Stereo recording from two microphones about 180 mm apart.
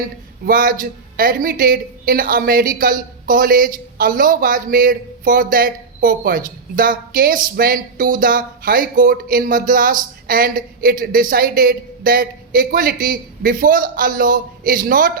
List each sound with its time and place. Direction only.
0.4 s a woman's voice: 50° right (ahead or behind)